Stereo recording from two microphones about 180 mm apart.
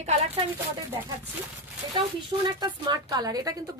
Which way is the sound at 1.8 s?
25° right (ahead or behind).